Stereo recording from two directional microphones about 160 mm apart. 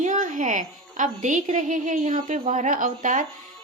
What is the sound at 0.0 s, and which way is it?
A woman's voice, 50° right (ahead or behind).